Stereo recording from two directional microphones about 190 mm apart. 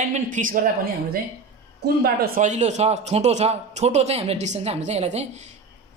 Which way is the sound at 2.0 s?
50° right (ahead or behind).